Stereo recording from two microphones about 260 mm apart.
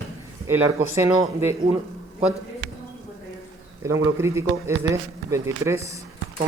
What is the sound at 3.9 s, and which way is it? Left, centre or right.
Speech, centre.